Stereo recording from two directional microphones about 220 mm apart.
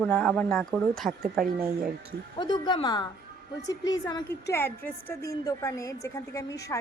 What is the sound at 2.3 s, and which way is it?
A woman's voice, 20° left (ahead or behind).